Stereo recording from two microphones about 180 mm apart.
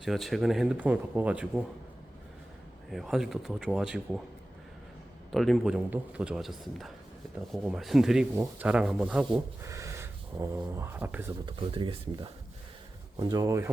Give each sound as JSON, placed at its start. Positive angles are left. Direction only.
{"t": 0.0, "sound": "speech", "side_deg": 0}
{"t": 2.9, "sound": "speech", "side_deg": 0}
{"t": 5.3, "sound": "speech", "side_deg": 0}
{"t": 9.6, "sound": "speech", "side_deg": -15}
{"t": 11.4, "sound": "speech", "side_deg": -25}